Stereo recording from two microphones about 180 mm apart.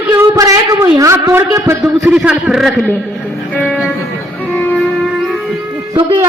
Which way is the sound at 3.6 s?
Centre (ahead or behind).